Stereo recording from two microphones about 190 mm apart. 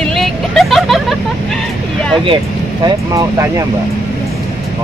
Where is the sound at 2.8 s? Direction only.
15° right (ahead or behind).